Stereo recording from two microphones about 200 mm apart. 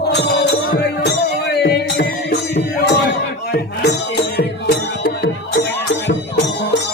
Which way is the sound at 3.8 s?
55° left (ahead or behind).